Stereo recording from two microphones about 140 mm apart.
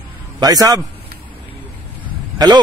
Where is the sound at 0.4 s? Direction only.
25° right (ahead or behind).